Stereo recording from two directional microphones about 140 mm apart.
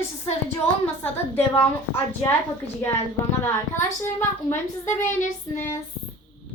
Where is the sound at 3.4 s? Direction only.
20° left (ahead or behind).